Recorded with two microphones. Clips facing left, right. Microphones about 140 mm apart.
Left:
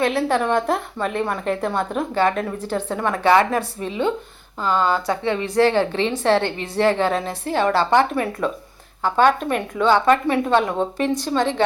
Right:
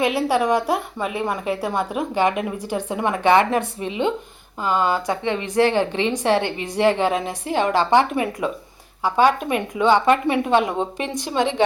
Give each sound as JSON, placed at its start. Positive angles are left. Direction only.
{"t": 0.0, "sound": "a woman's voice", "side_deg": -10}